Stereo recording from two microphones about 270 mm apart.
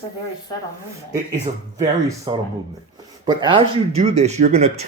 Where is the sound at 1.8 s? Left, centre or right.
Centre.